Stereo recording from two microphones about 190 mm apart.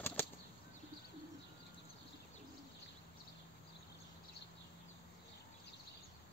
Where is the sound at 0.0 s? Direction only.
10° left (ahead or behind).